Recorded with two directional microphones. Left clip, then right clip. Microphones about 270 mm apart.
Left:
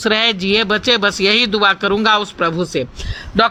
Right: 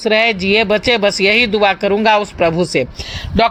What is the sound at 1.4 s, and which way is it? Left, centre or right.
A man's voice, centre.